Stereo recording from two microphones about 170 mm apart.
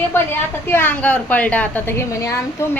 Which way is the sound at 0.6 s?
10° left (ahead or behind).